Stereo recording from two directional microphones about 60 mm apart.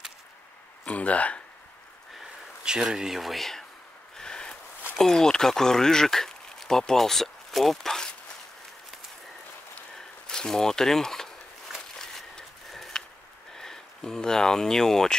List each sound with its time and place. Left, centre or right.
0.8 s speech: left
2.6 s speech: centre
4.2 s a sound: centre
4.9 s speech: centre
9.9 s a sound: centre
13.6 s speech: centre